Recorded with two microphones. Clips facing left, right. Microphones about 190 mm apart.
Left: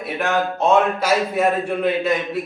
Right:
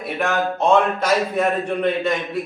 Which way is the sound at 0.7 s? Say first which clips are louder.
Even; 5° left (ahead or behind).